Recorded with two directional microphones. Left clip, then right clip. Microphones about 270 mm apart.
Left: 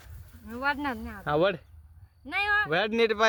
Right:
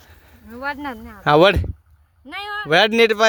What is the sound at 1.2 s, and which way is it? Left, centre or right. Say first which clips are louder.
Speech: right 13 dB; right.